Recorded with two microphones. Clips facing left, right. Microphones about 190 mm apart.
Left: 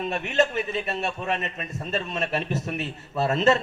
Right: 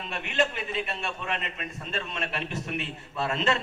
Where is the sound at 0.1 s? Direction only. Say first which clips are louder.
Left 3 dB; 45° left (ahead or behind).